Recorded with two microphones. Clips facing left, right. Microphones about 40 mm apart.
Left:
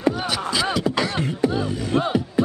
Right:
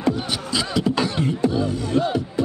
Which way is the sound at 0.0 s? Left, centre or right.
Left.